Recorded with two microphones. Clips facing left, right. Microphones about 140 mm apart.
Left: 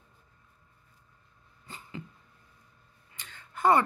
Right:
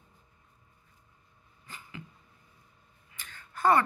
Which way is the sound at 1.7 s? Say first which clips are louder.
Left 3 dB; 30° left (ahead or behind).